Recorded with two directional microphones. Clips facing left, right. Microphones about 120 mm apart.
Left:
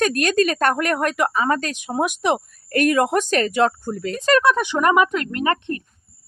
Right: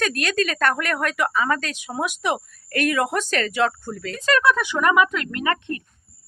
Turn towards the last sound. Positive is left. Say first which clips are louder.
# left 3 dB
turn(degrees=30)  # may be behind; listen again after turning